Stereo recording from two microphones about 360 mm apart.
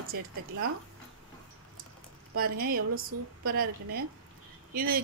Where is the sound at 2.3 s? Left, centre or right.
Right.